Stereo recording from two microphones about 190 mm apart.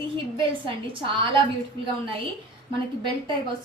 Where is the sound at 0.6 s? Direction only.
25° right (ahead or behind).